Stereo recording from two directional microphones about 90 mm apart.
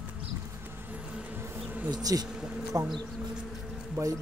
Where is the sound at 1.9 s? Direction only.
45° right (ahead or behind).